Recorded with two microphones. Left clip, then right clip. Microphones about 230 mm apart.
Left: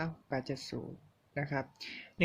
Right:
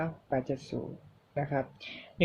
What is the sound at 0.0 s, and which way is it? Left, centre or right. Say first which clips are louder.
Speech: right 5 dB; left.